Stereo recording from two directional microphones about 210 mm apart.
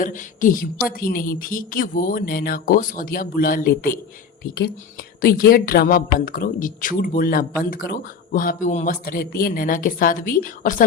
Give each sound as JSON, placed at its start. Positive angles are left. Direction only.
{"t": 0.0, "sound": "speech", "side_deg": 40}
{"t": 5.2, "sound": "speech", "side_deg": 45}